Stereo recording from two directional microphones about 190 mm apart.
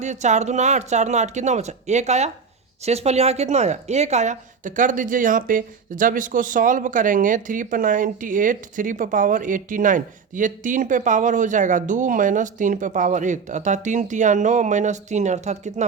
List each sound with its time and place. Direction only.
0.0 s speech: 40° right (ahead or behind)